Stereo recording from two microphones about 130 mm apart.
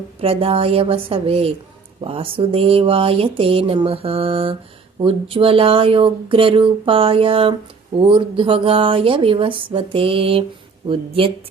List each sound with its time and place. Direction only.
0.2 s speech: 45° right (ahead or behind)